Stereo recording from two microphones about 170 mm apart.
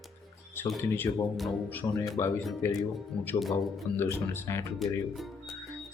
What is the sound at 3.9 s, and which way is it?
Speech, 15° left (ahead or behind).